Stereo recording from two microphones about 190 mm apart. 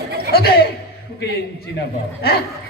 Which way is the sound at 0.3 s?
55° left (ahead or behind).